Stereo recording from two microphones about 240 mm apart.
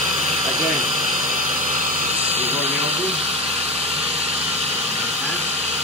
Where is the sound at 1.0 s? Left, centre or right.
Right.